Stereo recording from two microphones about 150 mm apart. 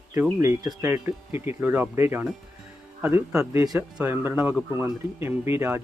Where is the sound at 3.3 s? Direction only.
20° right (ahead or behind).